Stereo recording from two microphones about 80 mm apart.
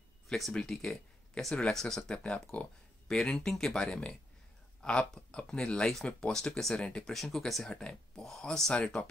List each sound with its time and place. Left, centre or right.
0.3 s speech: centre